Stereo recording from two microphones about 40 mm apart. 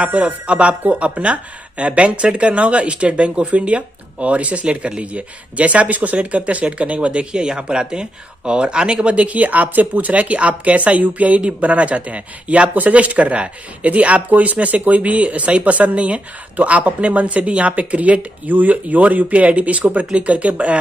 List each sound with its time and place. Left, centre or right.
0.0 s speech: right